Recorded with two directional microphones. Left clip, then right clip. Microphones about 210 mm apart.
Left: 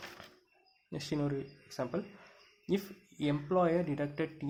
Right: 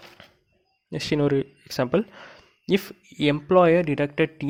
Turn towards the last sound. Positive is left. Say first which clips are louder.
# right 13 dB
turn(degrees=-35)  # may be behind; listen again after turning